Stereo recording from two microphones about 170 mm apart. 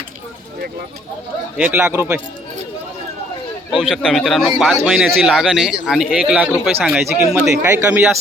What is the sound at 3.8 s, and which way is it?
A man's voice, centre (ahead or behind).